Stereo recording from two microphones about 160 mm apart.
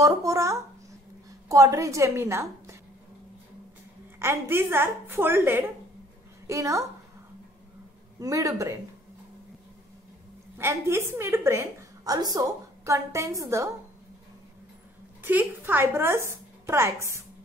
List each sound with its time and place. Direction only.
0.0 s a woman's voice: 20° right (ahead or behind)
4.2 s a woman's voice: 15° right (ahead or behind)
8.2 s a woman's voice: 20° right (ahead or behind)
10.6 s a woman's voice: 15° right (ahead or behind)
15.2 s a woman's voice: 10° right (ahead or behind)